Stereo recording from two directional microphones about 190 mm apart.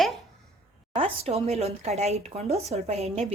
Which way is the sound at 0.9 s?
30° right (ahead or behind).